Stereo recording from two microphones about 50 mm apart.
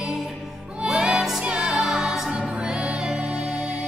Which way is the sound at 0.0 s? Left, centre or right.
Centre.